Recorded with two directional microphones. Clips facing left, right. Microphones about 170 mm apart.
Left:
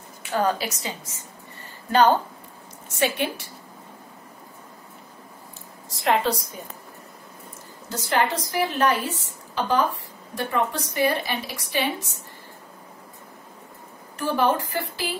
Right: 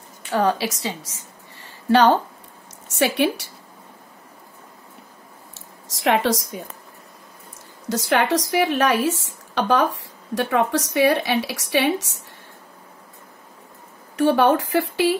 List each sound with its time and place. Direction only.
0.3 s a woman's voice: 90° right
2.9 s speech: 80° right
5.9 s speech: 85° right
7.9 s speech: 80° right
14.1 s speech: 70° right (ahead or behind)